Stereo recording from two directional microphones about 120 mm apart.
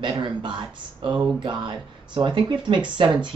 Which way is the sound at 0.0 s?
40° right (ahead or behind).